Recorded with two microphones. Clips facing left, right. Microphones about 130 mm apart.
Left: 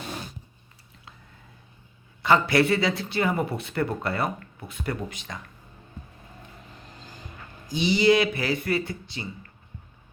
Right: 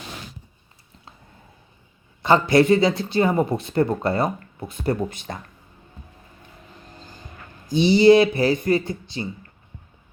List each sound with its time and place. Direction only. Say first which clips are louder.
2.2 s speech: right 4 dB; 25° right (ahead or behind)
7.8 s speech: right 7 dB; 30° right (ahead or behind)